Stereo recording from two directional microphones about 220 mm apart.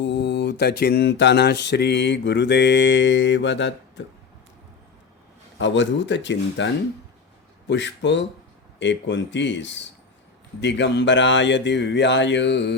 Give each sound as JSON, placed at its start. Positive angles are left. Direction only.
{"t": 0.0, "sound": "speech", "side_deg": 50}
{"t": 5.5, "sound": "speech", "side_deg": 55}
{"t": 7.7, "sound": "speech", "side_deg": 55}